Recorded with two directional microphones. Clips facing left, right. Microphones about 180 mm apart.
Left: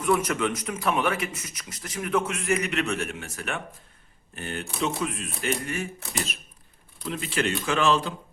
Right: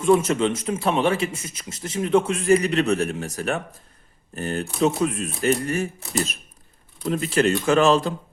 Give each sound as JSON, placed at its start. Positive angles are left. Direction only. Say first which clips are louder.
{"t": 0.0, "sound": "a man's voice", "louder": "right 6 dB", "side_deg": -25}